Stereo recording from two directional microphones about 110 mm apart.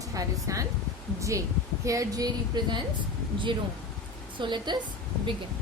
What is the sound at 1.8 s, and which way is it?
Speech, 30° right (ahead or behind).